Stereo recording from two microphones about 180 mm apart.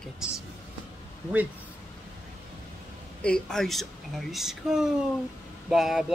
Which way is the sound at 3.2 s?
5° left (ahead or behind).